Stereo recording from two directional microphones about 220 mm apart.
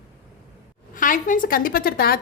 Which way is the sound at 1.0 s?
35° left (ahead or behind).